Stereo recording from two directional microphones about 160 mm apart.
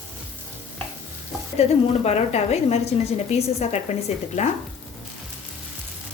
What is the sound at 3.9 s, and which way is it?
Speech, 40° left (ahead or behind).